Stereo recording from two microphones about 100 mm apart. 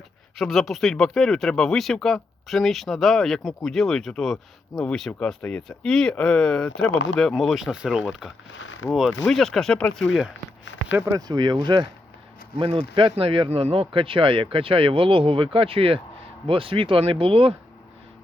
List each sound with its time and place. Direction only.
0.3 s speech: centre (ahead or behind)
11.0 s speech: 40° right (ahead or behind)
12.5 s speech: 65° right (ahead or behind)